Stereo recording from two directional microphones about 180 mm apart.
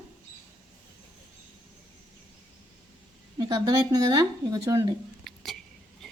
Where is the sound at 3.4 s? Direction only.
20° right (ahead or behind).